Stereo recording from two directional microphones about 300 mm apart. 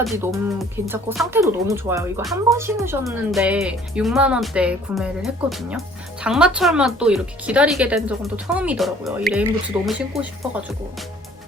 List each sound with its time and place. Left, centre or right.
0.0 s speech: centre